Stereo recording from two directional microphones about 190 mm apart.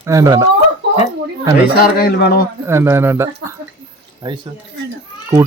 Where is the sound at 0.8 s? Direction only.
65° right (ahead or behind).